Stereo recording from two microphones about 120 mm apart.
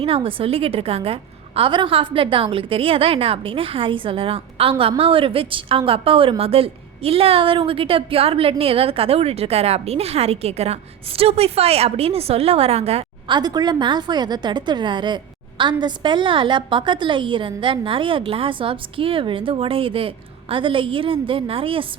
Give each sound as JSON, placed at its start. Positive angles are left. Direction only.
{"t": 0.0, "sound": "a woman's voice", "side_deg": -50}
{"t": 13.3, "sound": "a woman's voice", "side_deg": -35}